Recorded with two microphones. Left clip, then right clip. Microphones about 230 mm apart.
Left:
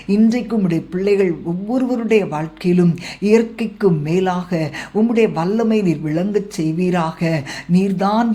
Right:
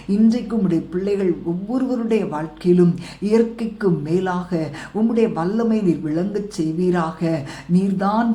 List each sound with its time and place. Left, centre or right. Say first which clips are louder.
0.1 s speech: left 2 dB; left